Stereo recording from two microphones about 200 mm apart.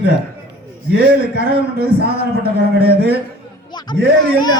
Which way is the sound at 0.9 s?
50° right (ahead or behind).